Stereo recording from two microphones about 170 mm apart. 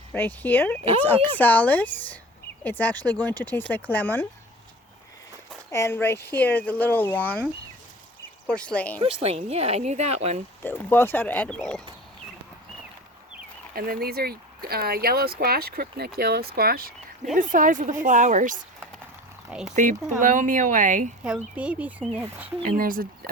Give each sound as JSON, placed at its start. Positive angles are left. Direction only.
{"t": 0.1, "sound": "speech", "side_deg": 10}
{"t": 5.7, "sound": "speech", "side_deg": 15}
{"t": 9.0, "sound": "speech", "side_deg": -35}
{"t": 10.6, "sound": "speech", "side_deg": 10}
{"t": 13.7, "sound": "speech", "side_deg": -60}
{"t": 17.3, "sound": "a woman's voice", "side_deg": -50}
{"t": 19.5, "sound": "speech", "side_deg": -5}
{"t": 19.7, "sound": "a woman's voice", "side_deg": -50}
{"t": 21.2, "sound": "speech", "side_deg": -5}
{"t": 22.8, "sound": "speech", "side_deg": -55}